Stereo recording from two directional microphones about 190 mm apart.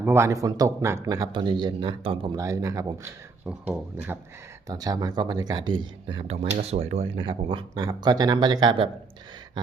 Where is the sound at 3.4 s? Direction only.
5° right (ahead or behind).